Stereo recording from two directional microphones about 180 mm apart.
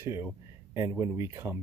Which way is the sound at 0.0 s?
15° right (ahead or behind).